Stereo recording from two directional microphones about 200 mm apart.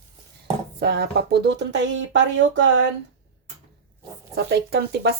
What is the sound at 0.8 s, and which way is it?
Speech, 55° right (ahead or behind).